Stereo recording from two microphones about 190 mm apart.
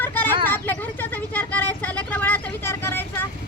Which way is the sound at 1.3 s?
10° left (ahead or behind).